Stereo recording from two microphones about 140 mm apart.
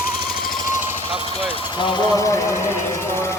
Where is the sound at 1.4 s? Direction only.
40° left (ahead or behind).